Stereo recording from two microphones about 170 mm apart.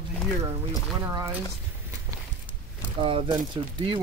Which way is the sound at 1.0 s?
15° right (ahead or behind).